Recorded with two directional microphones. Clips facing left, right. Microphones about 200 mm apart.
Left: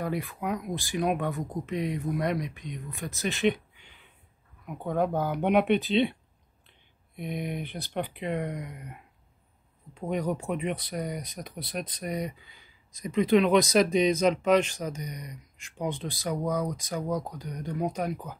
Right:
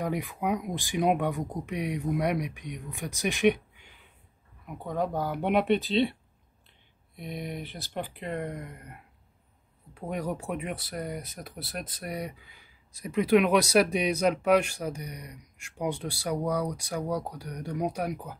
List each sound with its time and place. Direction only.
0.0 s speech: 15° right (ahead or behind)
4.6 s speech: centre (ahead or behind)
7.2 s speech: centre (ahead or behind)
9.9 s speech: 5° right (ahead or behind)